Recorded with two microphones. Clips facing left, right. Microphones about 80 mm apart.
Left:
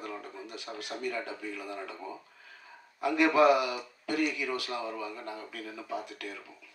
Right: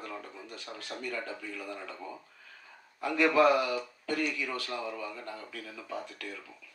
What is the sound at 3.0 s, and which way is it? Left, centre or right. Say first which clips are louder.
Speech: left 1 dB; centre.